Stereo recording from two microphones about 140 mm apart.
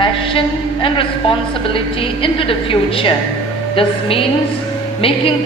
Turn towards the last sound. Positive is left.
turn(degrees=40)  # may be behind; listen again after turning